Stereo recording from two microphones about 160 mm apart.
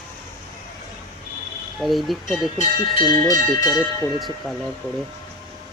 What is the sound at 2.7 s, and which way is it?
Speech, 25° left (ahead or behind).